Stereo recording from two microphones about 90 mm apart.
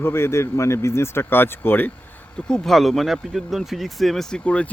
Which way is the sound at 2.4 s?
5° left (ahead or behind).